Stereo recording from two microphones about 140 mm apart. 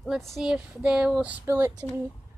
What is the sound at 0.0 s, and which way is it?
Speech, centre (ahead or behind).